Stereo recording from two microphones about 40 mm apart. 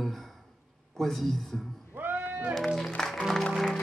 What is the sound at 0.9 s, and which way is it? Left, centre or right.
Speech, centre.